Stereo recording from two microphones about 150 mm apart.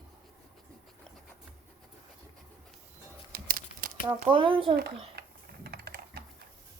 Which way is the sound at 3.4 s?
70° right (ahead or behind).